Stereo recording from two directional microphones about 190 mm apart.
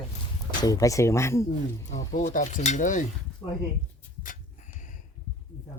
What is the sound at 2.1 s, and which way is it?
Speech, 45° left (ahead or behind).